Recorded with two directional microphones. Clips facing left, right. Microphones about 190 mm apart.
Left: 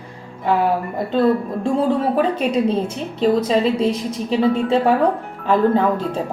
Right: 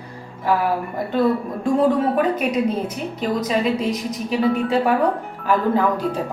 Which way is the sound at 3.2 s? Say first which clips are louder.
Left 5 dB; 30° left (ahead or behind).